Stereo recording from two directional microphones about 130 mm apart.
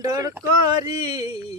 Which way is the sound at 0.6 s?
35° right (ahead or behind).